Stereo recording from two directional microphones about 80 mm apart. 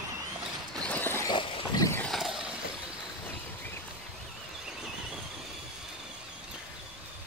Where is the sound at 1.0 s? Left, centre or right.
Left.